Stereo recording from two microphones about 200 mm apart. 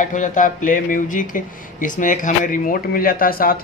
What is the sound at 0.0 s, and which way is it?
A man's voice, 40° left (ahead or behind).